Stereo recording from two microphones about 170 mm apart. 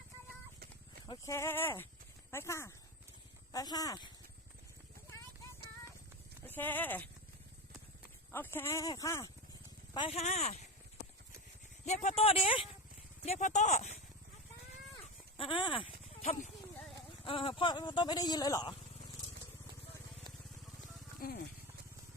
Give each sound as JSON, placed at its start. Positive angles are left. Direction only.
{"t": 1.0, "sound": "speech", "side_deg": 20}
{"t": 6.4, "sound": "speech", "side_deg": 10}
{"t": 8.3, "sound": "speech", "side_deg": 15}
{"t": 9.9, "sound": "speech", "side_deg": 30}
{"t": 11.9, "sound": "speech", "side_deg": 40}
{"t": 13.2, "sound": "speech", "side_deg": 45}
{"t": 15.0, "sound": "a sound", "side_deg": 30}
{"t": 17.2, "sound": "speech", "side_deg": 30}
{"t": 21.2, "sound": "music", "side_deg": 55}